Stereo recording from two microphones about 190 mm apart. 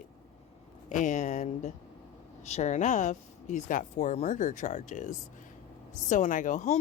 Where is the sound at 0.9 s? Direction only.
40° left (ahead or behind).